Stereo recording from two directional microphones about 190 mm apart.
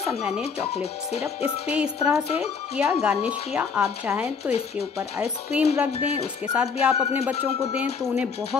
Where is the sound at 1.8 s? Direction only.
5° right (ahead or behind).